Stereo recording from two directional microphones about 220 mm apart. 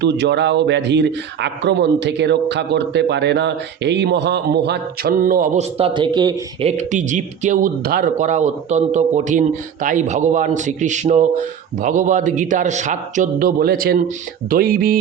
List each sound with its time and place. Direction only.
0.0 s speech: 50° right (ahead or behind)
5.7 s speech: 25° right (ahead or behind); by 14.9 s 40° right (ahead or behind)